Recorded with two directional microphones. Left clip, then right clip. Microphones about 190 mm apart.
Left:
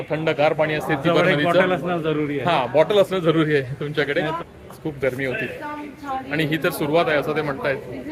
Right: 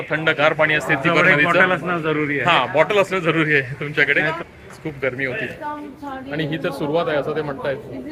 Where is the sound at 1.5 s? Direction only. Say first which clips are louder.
Right 2 dB; 5° right (ahead or behind).